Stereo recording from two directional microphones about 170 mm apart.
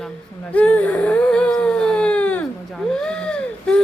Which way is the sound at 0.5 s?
10° left (ahead or behind).